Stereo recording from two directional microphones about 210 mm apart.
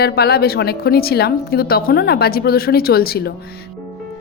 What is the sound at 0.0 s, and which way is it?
A woman's voice, 50° left (ahead or behind).